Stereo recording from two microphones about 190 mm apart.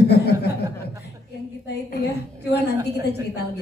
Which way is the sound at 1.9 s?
60° left (ahead or behind).